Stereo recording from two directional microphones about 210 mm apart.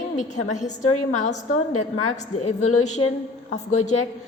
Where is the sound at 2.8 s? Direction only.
30° left (ahead or behind).